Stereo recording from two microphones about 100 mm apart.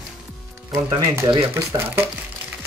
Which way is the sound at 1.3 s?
25° right (ahead or behind).